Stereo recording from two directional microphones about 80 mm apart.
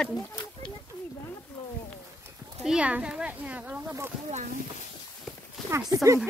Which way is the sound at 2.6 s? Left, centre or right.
Centre.